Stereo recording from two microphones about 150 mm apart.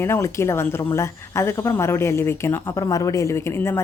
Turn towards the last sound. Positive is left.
turn(degrees=15)  # may be behind; listen again after turning